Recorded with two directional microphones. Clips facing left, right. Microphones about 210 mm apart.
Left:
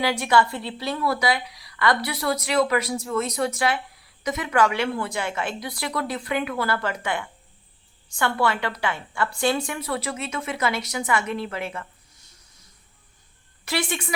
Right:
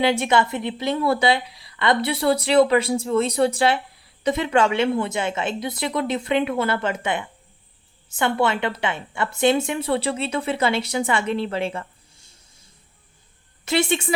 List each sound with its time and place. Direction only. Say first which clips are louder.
0.0 s a woman's voice: right 2 dB; 25° right (ahead or behind)
13.7 s a woman's voice: right 6 dB; 25° right (ahead or behind)